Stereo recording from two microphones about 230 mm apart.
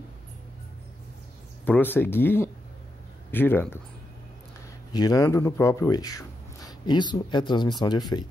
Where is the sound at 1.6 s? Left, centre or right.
Centre.